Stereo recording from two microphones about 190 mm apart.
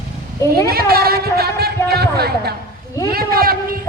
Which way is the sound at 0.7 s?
55° right (ahead or behind).